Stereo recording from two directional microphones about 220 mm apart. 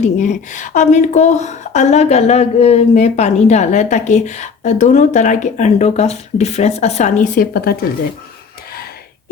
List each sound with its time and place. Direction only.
0.0 s speech: 35° left (ahead or behind)